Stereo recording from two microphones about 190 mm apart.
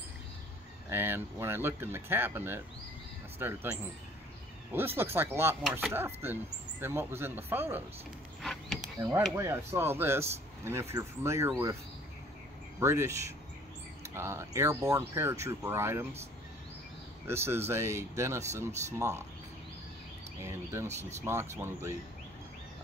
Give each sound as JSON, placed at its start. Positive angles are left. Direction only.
{"t": 0.8, "sound": "speech", "side_deg": -10}
{"t": 8.4, "sound": "a sound", "side_deg": 0}
{"t": 9.3, "sound": "speech", "side_deg": -15}
{"t": 12.8, "sound": "speech", "side_deg": -15}
{"t": 17.3, "sound": "speech", "side_deg": -10}
{"t": 20.4, "sound": "speech", "side_deg": -15}